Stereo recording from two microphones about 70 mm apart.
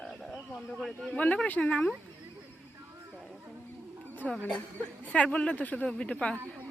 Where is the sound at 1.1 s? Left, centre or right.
Centre.